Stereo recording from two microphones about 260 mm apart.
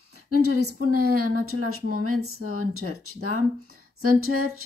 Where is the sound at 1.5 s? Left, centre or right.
Right.